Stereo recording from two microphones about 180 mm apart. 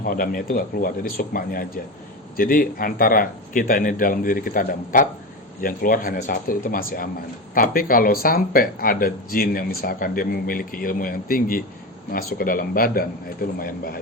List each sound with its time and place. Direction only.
0.0 s speech: 55° left (ahead or behind)